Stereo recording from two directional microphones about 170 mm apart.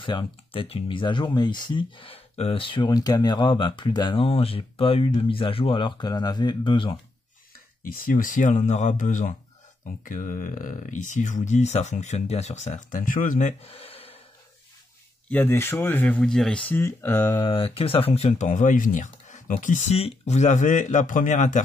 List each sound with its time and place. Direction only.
0.0 s speech: 30° left (ahead or behind)
7.8 s speech: 55° left (ahead or behind); by 14.2 s 35° left (ahead or behind)
15.2 s speech: 10° left (ahead or behind)
17.4 s speech: 30° left (ahead or behind); by 21.5 s 45° left (ahead or behind)